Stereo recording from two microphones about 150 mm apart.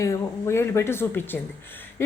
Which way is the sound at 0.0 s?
20° left (ahead or behind).